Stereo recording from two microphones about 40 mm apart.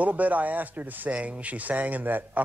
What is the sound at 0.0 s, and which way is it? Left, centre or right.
Speech, right.